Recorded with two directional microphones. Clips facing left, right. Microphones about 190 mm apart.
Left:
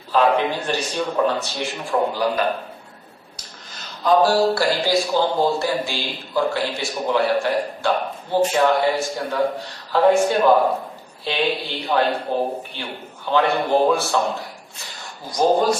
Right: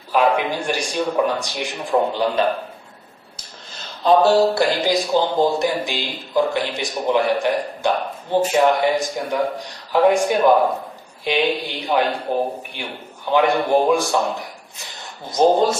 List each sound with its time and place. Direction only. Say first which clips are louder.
0.1 s a man's voice: even; 15° right (ahead or behind)
4.0 s a man's voice: right 2 dB; 25° right (ahead or behind)
15.2 s speech: right 2 dB; 25° right (ahead or behind)